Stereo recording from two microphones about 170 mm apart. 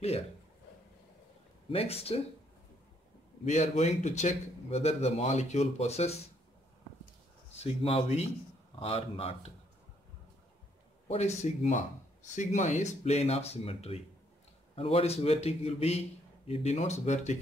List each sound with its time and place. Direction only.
1.7 s speech: 35° left (ahead or behind)
3.4 s speech: 40° left (ahead or behind)
7.5 s speech: 35° left (ahead or behind)
11.1 s speech: 40° left (ahead or behind)